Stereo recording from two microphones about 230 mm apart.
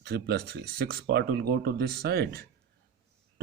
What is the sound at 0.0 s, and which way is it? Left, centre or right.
Speech, right.